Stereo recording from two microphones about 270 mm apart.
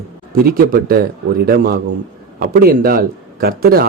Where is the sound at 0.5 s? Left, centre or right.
Right.